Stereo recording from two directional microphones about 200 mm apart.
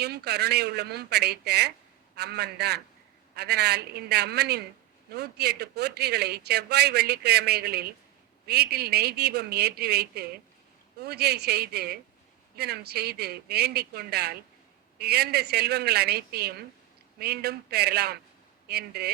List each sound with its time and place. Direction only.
0.0 s a man's voice: 55° right (ahead or behind)